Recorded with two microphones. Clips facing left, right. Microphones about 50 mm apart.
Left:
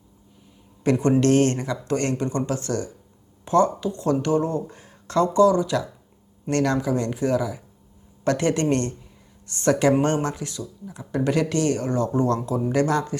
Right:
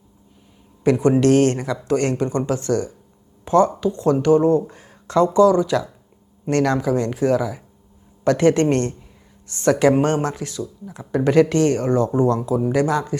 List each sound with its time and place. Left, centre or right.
0.9 s speech: right
1.5 s speech: centre
1.8 s speech: right
3.4 s a sound: right
3.8 s speech: right